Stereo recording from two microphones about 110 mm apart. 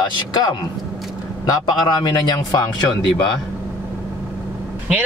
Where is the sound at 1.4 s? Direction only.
40° left (ahead or behind).